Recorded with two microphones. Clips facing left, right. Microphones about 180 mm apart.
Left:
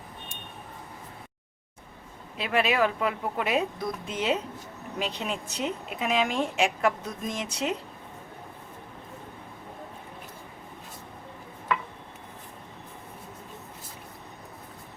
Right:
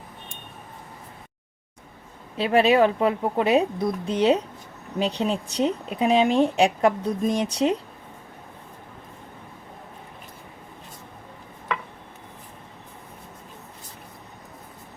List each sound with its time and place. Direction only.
2.4 s a woman's voice: 30° right (ahead or behind)